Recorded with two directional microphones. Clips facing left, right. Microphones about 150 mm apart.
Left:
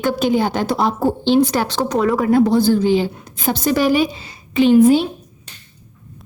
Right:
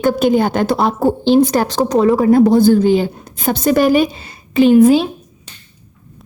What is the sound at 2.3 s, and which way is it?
A woman's voice, 45° right (ahead or behind).